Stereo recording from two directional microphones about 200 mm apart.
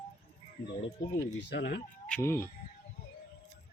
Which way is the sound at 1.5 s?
60° left (ahead or behind).